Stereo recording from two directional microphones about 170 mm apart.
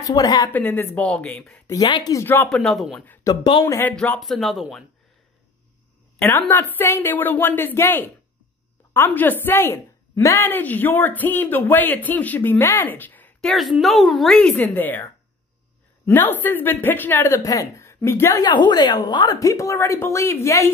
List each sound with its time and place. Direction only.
0.0 s a woman's voice: 20° left (ahead or behind)
0.5 s a woman's voice: 10° left (ahead or behind)
1.7 s a woman's voice: 25° left (ahead or behind)
2.2 s a woman's voice: 10° left (ahead or behind)
2.6 s speech: centre (ahead or behind)
3.3 s a woman's voice: 30° left (ahead or behind)
3.6 s a woman's voice: 15° left (ahead or behind)
3.9 s speech: 5° left (ahead or behind)
6.1 s a woman's voice: 10° left (ahead or behind)
16.1 s a woman's voice: 10° left (ahead or behind)
18.4 s a woman's voice: 25° left (ahead or behind)